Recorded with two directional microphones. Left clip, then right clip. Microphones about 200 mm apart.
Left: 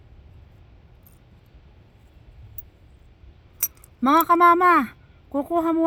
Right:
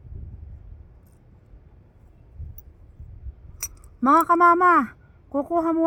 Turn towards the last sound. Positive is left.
turn(degrees=10)  # may be behind; listen again after turning